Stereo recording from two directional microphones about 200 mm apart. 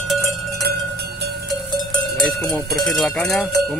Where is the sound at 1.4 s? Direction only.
Centre (ahead or behind).